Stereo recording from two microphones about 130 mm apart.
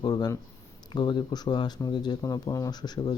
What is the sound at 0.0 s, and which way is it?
Speech, 30° left (ahead or behind).